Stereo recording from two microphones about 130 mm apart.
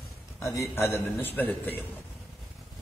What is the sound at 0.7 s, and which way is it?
A man's voice, 20° left (ahead or behind).